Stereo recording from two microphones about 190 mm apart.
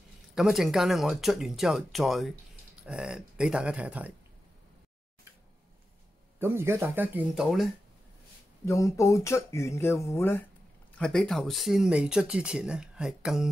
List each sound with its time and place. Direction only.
0.3 s speech: centre (ahead or behind)
6.4 s speech: 15° right (ahead or behind)
8.6 s speech: 15° left (ahead or behind); by 13.5 s centre (ahead or behind)